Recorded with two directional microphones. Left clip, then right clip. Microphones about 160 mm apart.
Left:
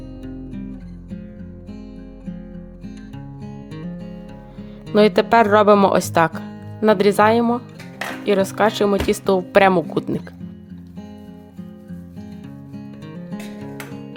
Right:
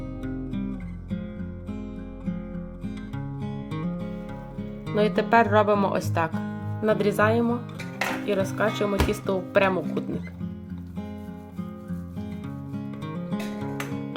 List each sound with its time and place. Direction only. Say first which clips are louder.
4.9 s speech: left 7 dB; 75° left (ahead or behind)